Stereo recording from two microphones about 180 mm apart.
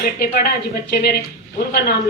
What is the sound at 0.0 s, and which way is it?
Speech, 65° left (ahead or behind).